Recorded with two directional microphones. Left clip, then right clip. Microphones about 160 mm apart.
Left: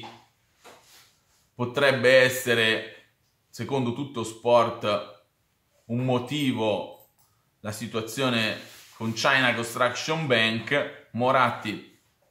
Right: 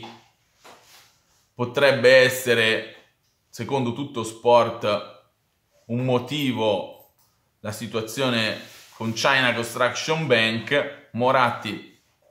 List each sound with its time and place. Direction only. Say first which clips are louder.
1.6 s speech: right 4 dB; 20° right (ahead or behind)